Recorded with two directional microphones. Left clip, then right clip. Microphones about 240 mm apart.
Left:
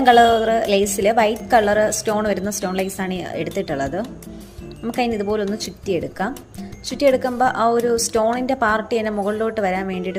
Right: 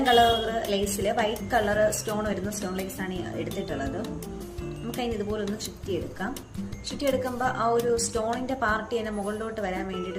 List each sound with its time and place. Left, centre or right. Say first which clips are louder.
0.0 s a woman's voice: left 8 dB; left